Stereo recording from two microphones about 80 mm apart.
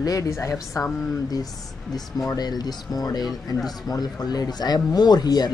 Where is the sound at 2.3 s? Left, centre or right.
Left.